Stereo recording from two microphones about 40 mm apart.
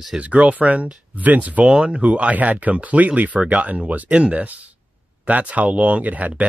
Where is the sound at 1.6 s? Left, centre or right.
Right.